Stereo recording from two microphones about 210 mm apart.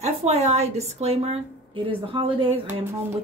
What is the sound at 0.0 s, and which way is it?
Speech, 30° right (ahead or behind).